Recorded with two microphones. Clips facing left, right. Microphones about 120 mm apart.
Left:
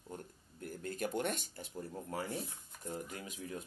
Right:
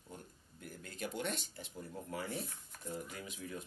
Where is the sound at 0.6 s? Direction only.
50° left (ahead or behind).